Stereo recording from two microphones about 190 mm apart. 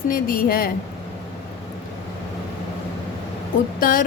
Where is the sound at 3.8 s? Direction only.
50° left (ahead or behind).